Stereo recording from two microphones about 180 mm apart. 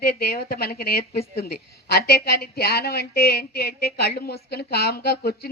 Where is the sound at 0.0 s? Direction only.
60° left (ahead or behind).